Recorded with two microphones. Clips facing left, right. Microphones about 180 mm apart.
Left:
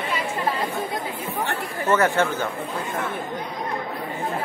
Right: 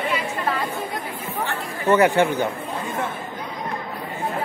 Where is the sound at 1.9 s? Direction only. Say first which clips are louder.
Right 4 dB; 15° right (ahead or behind).